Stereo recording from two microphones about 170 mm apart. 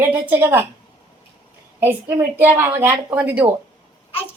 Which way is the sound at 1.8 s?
10° right (ahead or behind).